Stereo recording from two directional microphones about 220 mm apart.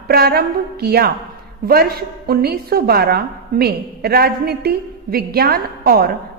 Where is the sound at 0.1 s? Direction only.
45° right (ahead or behind).